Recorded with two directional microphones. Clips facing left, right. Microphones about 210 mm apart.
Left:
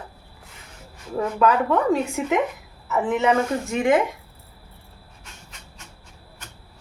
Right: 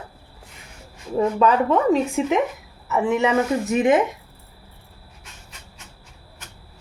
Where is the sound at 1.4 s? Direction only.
20° right (ahead or behind).